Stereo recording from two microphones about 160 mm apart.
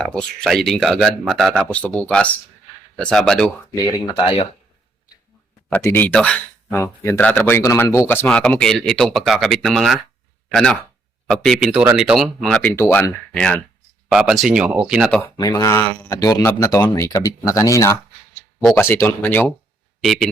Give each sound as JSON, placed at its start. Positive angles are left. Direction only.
{"t": 0.0, "sound": "speech", "side_deg": 5}
{"t": 3.8, "sound": "speech", "side_deg": 25}
{"t": 5.7, "sound": "speech", "side_deg": 15}
{"t": 12.7, "sound": "speech", "side_deg": 15}
{"t": 15.4, "sound": "speech", "side_deg": 20}